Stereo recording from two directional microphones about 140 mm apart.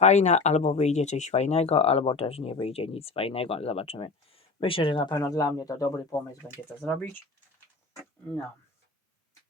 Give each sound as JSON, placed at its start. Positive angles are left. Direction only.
{"t": 0.0, "sound": "speech", "side_deg": 55}
{"t": 6.4, "sound": "speech", "side_deg": 5}